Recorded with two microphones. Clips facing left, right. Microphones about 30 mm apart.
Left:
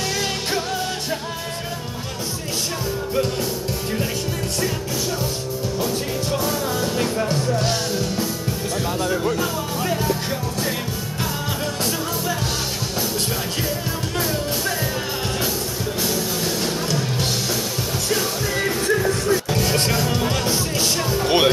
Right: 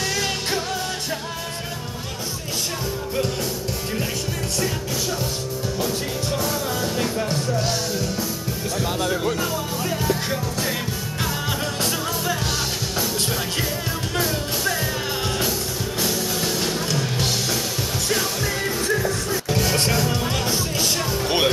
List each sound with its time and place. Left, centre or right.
6.3 s music: centre
8.8 s music: centre
14.1 s music: centre
16.0 s music: centre
18.6 s music: centre